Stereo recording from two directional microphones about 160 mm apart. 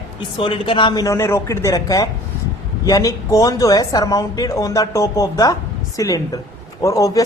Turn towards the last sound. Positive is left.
turn(degrees=20)  # may be behind; listen again after turning